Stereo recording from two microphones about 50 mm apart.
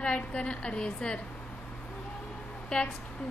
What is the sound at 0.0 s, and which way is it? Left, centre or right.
A woman's voice, left.